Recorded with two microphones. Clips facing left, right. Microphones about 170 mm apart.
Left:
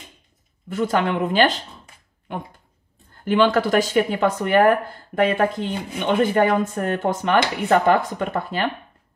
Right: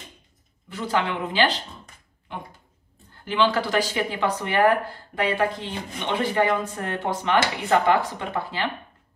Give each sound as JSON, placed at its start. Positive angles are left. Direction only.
{"t": 0.7, "sound": "speech", "side_deg": 50}
{"t": 3.3, "sound": "speech", "side_deg": 50}